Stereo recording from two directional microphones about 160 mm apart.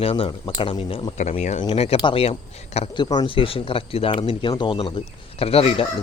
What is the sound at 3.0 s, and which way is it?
Speech, 25° left (ahead or behind).